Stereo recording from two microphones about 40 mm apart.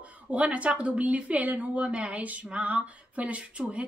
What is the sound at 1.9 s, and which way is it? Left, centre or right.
A woman's voice, right.